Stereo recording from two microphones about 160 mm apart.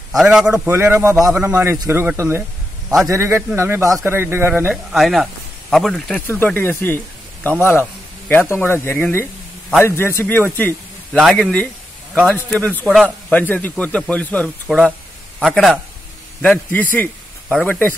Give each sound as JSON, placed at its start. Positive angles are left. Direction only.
{"t": 0.1, "sound": "speech", "side_deg": -5}
{"t": 0.5, "sound": "speech", "side_deg": -15}
{"t": 1.1, "sound": "speech", "side_deg": -5}
{"t": 6.2, "sound": "speech", "side_deg": 15}
{"t": 8.3, "sound": "speech", "side_deg": 15}
{"t": 11.1, "sound": "speech", "side_deg": 0}
{"t": 12.8, "sound": "speech", "side_deg": -5}
{"t": 13.3, "sound": "speech", "side_deg": 10}
{"t": 14.8, "sound": "a sound", "side_deg": -5}
{"t": 15.4, "sound": "speech", "side_deg": 5}